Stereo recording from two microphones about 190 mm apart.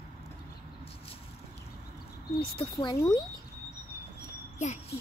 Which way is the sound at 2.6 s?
25° left (ahead or behind).